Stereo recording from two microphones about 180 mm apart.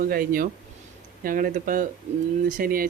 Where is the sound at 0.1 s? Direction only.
55° right (ahead or behind).